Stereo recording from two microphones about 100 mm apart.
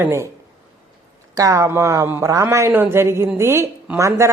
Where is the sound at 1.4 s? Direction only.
30° right (ahead or behind).